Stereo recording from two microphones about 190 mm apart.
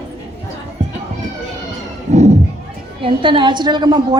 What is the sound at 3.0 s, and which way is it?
A woman's voice, 25° right (ahead or behind).